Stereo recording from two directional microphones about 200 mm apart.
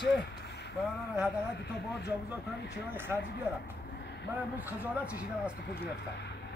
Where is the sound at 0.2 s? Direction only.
55° left (ahead or behind).